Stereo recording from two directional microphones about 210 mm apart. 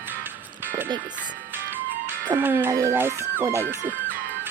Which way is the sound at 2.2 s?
10° right (ahead or behind).